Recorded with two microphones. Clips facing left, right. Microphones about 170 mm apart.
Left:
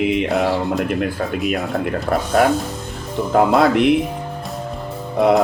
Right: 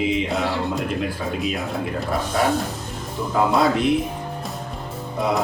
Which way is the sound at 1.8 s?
60° left (ahead or behind).